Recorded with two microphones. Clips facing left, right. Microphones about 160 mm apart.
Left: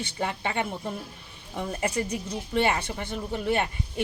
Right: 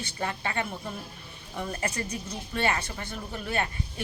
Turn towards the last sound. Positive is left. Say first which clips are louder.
# left 5 dB
turn(degrees=20)  # may be behind; listen again after turning